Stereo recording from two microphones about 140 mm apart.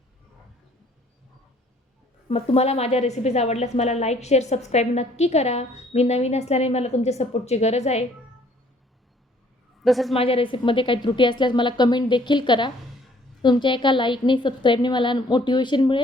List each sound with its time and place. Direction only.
2.3 s a woman's voice: 45° left (ahead or behind)
9.8 s a woman's voice: centre (ahead or behind)
10.2 s a woman's voice: 40° left (ahead or behind)